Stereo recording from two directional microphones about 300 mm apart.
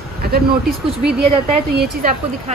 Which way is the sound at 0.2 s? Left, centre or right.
Right.